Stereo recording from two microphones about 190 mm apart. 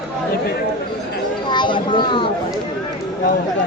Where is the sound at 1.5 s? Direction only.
25° left (ahead or behind).